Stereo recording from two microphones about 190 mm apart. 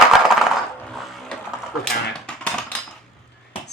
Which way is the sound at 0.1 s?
Centre (ahead or behind).